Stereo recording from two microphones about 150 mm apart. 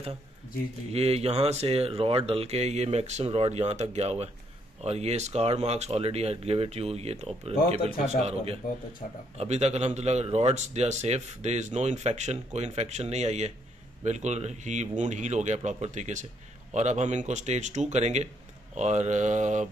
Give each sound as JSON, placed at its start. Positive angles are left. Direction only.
{"t": 0.9, "sound": "speech", "side_deg": -45}